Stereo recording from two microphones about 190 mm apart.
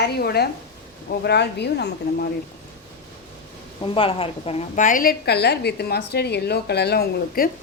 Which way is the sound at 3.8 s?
30° left (ahead or behind).